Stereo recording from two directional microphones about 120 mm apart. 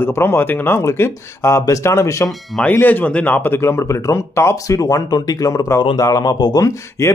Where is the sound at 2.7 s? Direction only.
15° left (ahead or behind).